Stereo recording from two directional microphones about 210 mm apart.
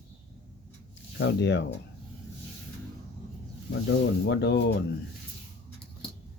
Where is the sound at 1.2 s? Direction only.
55° left (ahead or behind).